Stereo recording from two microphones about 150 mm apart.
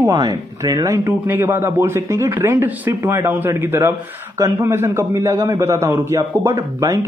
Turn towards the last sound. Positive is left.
turn(degrees=-20)  # may be behind; listen again after turning